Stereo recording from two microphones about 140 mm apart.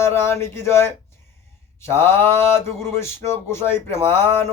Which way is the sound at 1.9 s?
15° left (ahead or behind).